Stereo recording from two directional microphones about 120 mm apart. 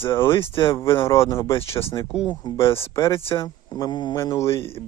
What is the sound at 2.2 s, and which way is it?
Speech, 35° left (ahead or behind).